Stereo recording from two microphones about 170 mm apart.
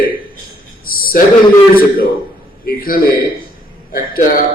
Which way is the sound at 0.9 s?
60° left (ahead or behind).